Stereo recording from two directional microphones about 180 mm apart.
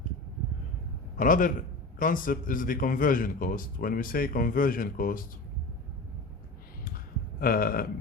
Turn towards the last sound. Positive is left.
turn(degrees=55)  # may be behind; listen again after turning